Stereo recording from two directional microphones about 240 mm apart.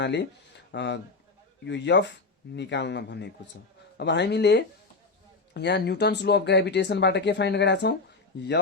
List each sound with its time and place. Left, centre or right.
0.0 s speech: left